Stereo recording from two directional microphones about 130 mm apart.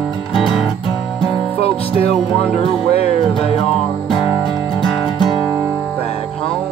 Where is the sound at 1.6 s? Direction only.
50° left (ahead or behind).